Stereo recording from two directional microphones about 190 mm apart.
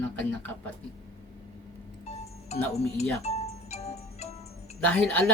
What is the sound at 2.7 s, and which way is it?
Speech, 35° left (ahead or behind).